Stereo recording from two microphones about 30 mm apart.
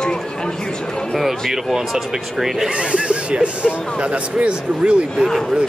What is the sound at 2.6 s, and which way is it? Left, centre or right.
Speech, right.